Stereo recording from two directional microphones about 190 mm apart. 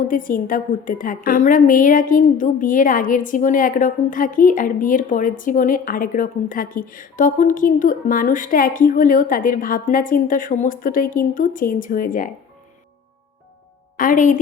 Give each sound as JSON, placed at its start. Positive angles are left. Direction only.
{"t": 0.1, "sound": "a woman's voice", "side_deg": 45}
{"t": 13.9, "sound": "a woman's voice", "side_deg": 45}